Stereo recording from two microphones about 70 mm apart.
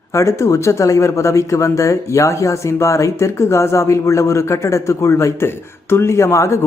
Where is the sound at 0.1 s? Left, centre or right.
Left.